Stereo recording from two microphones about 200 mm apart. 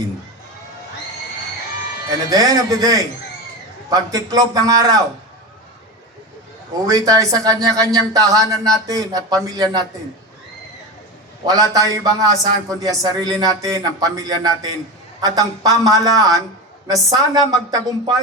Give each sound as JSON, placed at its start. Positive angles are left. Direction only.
{"t": 2.0, "sound": "a woman's voice", "side_deg": -20}
{"t": 6.8, "sound": "a man's voice", "side_deg": -15}
{"t": 11.4, "sound": "a man's voice", "side_deg": -20}